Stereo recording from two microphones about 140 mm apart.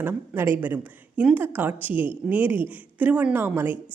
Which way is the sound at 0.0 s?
15° right (ahead or behind).